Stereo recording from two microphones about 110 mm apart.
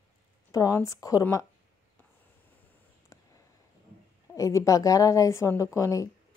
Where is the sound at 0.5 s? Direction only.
30° left (ahead or behind).